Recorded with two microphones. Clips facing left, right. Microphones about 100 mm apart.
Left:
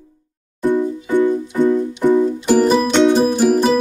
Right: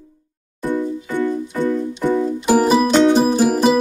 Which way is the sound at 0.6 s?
15° left (ahead or behind).